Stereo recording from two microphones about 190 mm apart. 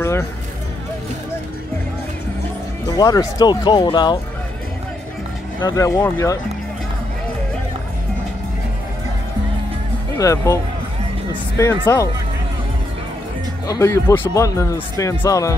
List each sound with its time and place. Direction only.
2.9 s speech: 20° left (ahead or behind)
5.6 s speech: 20° left (ahead or behind)
10.1 s speech: 15° left (ahead or behind)
13.7 s speech: 15° left (ahead or behind)